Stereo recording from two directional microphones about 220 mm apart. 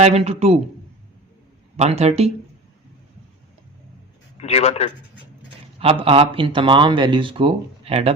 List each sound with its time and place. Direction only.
0.0 s speech: 30° right (ahead or behind)
1.7 s speech: 30° right (ahead or behind)
4.4 s a man's voice: 30° left (ahead or behind)
5.8 s speech: 25° right (ahead or behind)